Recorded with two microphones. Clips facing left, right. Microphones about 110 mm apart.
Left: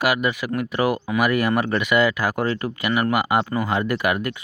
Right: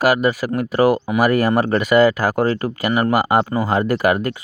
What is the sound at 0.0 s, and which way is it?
Speech, 40° right (ahead or behind).